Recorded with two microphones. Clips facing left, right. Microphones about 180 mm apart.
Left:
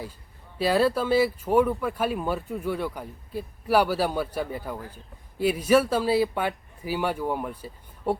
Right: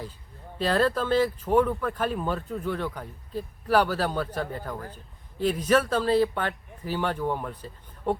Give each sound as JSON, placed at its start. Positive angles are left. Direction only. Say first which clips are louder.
{"t": 0.6, "sound": "speech", "louder": "left 2 dB", "side_deg": 10}